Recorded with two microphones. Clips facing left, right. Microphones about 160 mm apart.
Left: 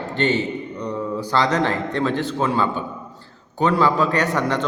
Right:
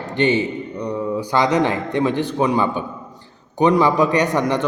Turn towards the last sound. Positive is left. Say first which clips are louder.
# right 3 dB
turn(degrees=-15)  # may be behind; listen again after turning